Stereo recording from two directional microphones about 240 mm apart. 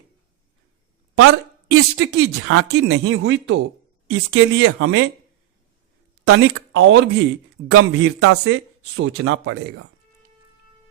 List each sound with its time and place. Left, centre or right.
1.2 s speech: right
6.2 s speech: right